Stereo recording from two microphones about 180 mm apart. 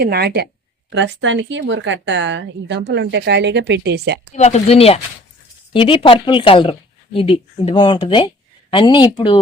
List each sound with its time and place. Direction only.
0.0 s speech: 60° right (ahead or behind)
0.9 s speech: 90° right; by 4.2 s 70° right (ahead or behind)
4.4 s speech: 40° left (ahead or behind)